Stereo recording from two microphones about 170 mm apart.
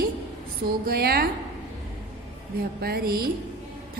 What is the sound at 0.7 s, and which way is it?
Speech, 65° right (ahead or behind).